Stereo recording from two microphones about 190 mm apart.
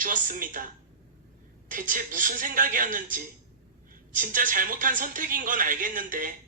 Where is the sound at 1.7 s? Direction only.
45° right (ahead or behind).